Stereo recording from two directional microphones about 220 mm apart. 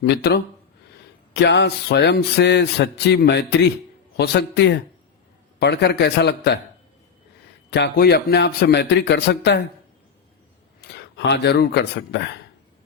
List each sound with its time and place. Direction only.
0.0 s music: 50° left (ahead or behind)
7.7 s music: 50° left (ahead or behind)
10.8 s speech: 50° left (ahead or behind)